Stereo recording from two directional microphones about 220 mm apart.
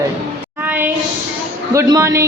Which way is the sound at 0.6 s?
10° right (ahead or behind).